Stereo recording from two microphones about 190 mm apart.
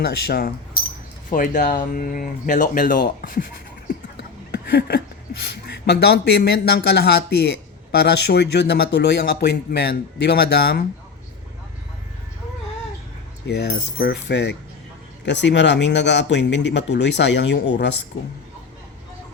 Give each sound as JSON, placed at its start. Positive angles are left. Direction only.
{"t": 0.0, "sound": "speech", "side_deg": 55}
{"t": 1.3, "sound": "speech", "side_deg": 45}
{"t": 4.5, "sound": "a sound", "side_deg": 55}
{"t": 5.5, "sound": "speech", "side_deg": 60}
{"t": 13.5, "sound": "speech", "side_deg": 60}